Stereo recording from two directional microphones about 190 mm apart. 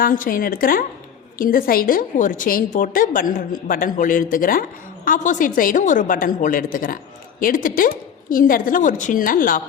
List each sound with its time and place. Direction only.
0.0 s a woman's voice: 45° left (ahead or behind)